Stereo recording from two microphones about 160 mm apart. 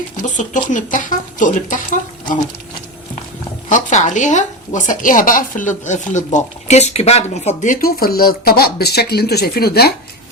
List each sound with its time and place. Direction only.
0.2 s speech: 50° left (ahead or behind)
3.7 s a woman's voice: 50° left (ahead or behind); by 9.9 s 80° left